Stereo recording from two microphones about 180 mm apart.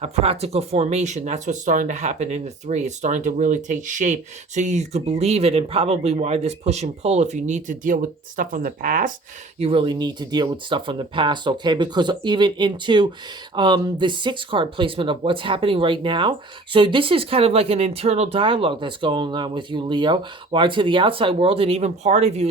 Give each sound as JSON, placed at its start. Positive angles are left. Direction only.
{"t": 0.0, "sound": "speech", "side_deg": -35}
{"t": 9.6, "sound": "speech", "side_deg": -30}